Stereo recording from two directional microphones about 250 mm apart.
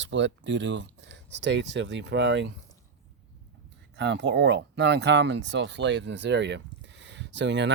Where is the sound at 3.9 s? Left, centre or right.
Right.